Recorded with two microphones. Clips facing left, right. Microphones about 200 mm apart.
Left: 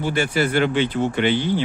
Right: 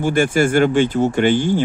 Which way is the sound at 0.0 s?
50° right (ahead or behind).